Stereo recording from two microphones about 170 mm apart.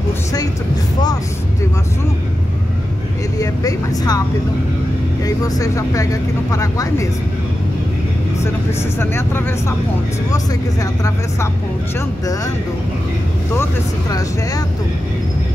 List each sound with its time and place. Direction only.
3.3 s speech: 20° left (ahead or behind)
5.2 s speech: 20° left (ahead or behind)
9.0 s speech: 15° left (ahead or behind)